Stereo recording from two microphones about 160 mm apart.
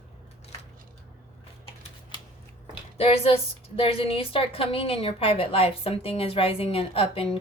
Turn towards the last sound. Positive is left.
turn(degrees=35)  # may be behind; listen again after turning